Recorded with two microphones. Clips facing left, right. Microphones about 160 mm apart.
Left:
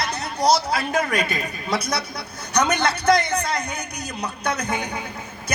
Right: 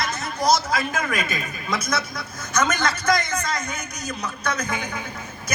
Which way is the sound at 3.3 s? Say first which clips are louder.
Left 2 dB; 35° left (ahead or behind).